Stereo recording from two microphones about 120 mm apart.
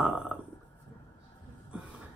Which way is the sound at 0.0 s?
10° right (ahead or behind).